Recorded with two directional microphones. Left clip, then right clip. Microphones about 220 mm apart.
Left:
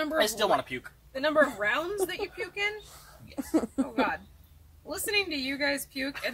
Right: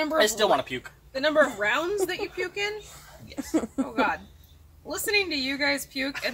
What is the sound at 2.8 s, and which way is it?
Speech, 25° left (ahead or behind).